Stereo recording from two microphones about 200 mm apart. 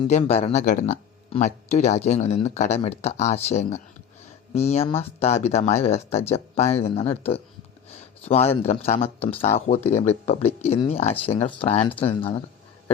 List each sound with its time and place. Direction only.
0.0 s speech: 30° left (ahead or behind)